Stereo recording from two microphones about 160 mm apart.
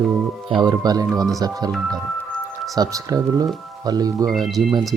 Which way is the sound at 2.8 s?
20° right (ahead or behind).